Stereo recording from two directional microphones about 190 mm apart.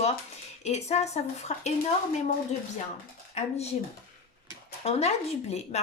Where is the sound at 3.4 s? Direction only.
35° left (ahead or behind).